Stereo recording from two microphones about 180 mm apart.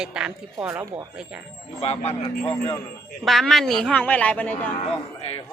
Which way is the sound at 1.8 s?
35° left (ahead or behind).